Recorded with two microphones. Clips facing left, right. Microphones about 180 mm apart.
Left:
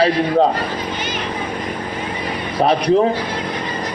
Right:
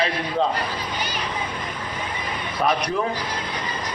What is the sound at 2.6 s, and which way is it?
Speech, 35° left (ahead or behind).